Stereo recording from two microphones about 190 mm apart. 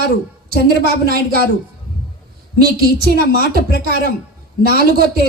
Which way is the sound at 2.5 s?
50° right (ahead or behind).